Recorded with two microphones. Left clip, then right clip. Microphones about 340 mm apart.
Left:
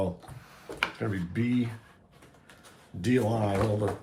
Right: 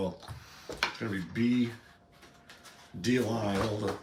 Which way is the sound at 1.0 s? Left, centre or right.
Centre.